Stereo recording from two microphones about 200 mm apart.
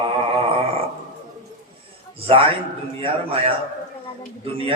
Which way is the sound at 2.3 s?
30° right (ahead or behind).